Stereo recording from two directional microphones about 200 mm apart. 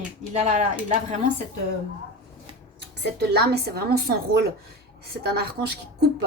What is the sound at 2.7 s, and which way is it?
A woman's voice, 55° right (ahead or behind).